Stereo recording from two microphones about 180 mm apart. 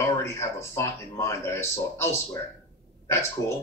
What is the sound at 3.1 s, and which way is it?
Speech, 15° left (ahead or behind).